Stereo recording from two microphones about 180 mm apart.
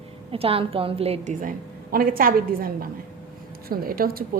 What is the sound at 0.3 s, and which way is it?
A woman's voice, 30° right (ahead or behind).